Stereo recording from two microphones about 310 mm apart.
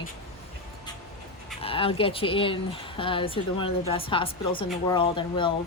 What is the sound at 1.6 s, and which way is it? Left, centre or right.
Speech, centre.